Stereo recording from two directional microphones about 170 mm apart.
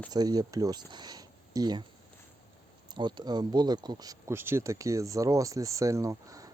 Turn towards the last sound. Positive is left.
turn(degrees=-20)  # may be behind; listen again after turning